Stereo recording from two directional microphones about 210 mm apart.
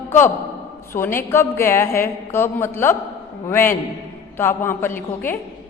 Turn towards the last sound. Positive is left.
turn(degrees=10)  # may be behind; listen again after turning